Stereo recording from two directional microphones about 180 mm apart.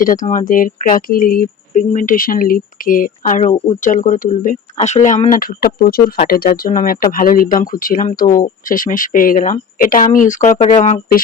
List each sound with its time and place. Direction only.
0.0 s speech: 50° left (ahead or behind)